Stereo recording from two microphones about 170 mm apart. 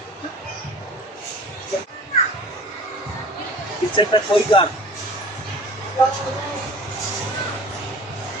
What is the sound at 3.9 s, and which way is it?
Speech, 30° left (ahead or behind).